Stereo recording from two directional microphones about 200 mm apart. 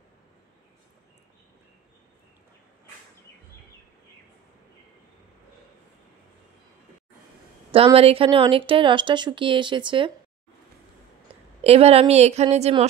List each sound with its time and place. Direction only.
7.7 s a woman's voice: 30° right (ahead or behind)
11.6 s a woman's voice: 30° right (ahead or behind)